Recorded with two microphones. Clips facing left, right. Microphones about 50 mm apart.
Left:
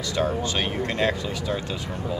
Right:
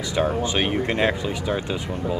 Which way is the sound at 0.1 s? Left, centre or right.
Centre.